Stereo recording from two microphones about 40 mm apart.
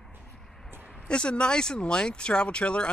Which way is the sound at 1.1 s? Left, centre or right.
Left.